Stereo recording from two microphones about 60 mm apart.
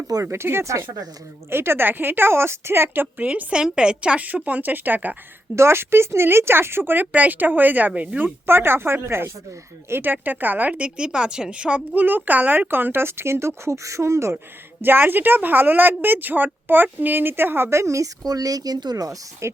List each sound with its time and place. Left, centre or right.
0.3 s speech: right
3.2 s a woman's voice: right
5.5 s speech: right
8.4 s speech: right
9.9 s a woman's voice: right; by 11.8 s centre
11.9 s speech: right
13.7 s speech: right
14.8 s speech: right
18.3 s speech: right
19.4 s speech: right